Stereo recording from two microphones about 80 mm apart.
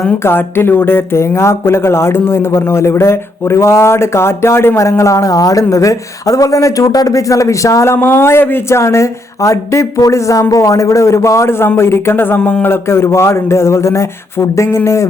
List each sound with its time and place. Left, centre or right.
0.0 s speech: left